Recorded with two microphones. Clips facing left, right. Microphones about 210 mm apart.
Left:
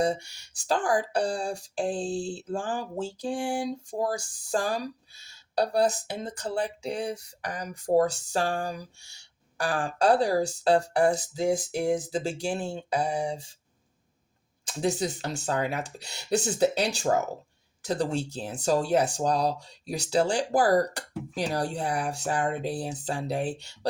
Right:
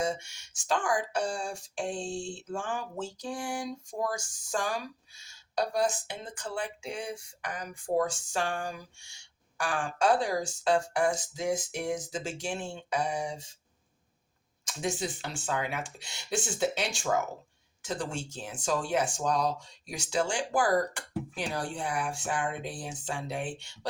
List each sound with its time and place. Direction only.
0.0 s speech: 35° left (ahead or behind)
14.6 s speech: 35° left (ahead or behind)